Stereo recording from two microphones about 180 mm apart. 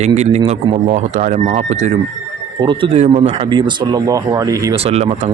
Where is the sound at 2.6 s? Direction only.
25° right (ahead or behind).